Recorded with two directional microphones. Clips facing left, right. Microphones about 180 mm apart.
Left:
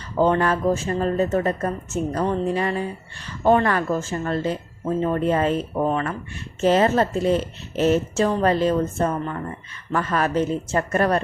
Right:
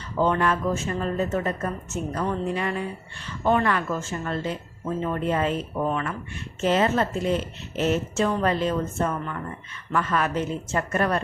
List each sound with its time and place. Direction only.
0.2 s speech: 35° left (ahead or behind)